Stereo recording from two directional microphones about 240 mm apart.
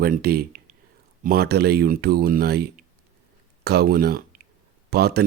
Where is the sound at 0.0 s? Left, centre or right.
Right.